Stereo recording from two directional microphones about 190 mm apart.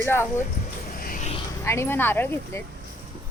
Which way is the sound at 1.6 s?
15° left (ahead or behind).